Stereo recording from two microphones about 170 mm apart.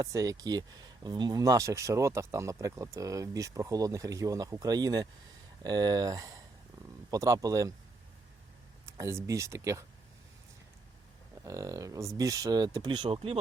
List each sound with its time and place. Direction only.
0.0 s speech: 20° right (ahead or behind)
8.9 s speech: 15° right (ahead or behind)
11.4 s speech: 20° right (ahead or behind)